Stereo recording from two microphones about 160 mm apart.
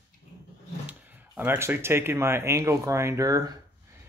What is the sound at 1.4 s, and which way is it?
Speech, 15° right (ahead or behind).